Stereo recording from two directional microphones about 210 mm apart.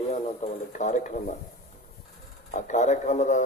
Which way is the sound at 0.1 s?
35° left (ahead or behind).